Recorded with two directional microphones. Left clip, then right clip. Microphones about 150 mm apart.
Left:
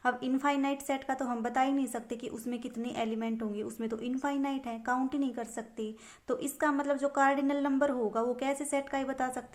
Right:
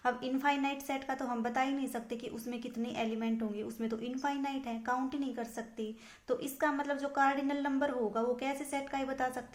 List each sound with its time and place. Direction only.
0.0 s a woman's voice: 30° left (ahead or behind)